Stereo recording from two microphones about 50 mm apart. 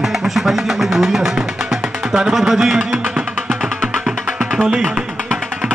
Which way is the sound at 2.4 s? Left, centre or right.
Centre.